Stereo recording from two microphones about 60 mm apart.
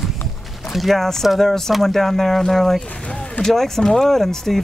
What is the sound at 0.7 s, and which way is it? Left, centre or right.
Speech, centre.